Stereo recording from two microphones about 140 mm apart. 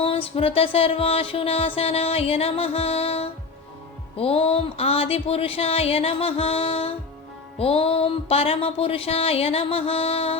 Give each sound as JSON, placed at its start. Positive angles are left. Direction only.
{"t": 0.0, "sound": "music", "side_deg": 40}